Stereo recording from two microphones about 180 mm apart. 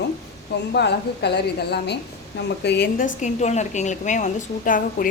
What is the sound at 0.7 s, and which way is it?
A woman's voice, 65° left (ahead or behind).